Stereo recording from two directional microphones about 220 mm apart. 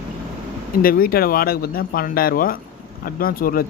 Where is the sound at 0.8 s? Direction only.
40° left (ahead or behind).